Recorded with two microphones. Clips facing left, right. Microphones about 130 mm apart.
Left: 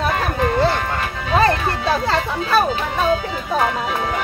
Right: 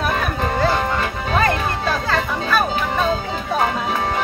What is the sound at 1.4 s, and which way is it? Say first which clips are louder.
Music: left 3 dB; 30° left (ahead or behind).